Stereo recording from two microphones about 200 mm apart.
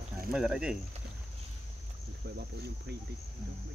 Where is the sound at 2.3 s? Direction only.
55° right (ahead or behind).